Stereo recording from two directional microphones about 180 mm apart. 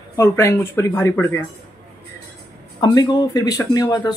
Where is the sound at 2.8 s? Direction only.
25° left (ahead or behind).